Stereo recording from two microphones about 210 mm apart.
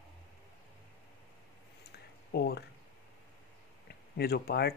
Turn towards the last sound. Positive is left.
turn(degrees=50)  # may be behind; listen again after turning